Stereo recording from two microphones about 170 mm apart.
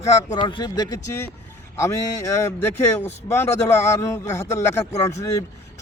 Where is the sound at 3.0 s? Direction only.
15° left (ahead or behind).